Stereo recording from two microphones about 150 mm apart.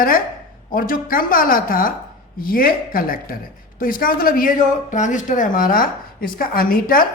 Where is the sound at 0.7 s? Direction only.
70° left (ahead or behind).